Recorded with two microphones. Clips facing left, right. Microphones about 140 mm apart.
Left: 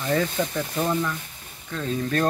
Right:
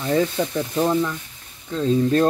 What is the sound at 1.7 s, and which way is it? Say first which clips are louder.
Speech: right 8 dB; 25° right (ahead or behind).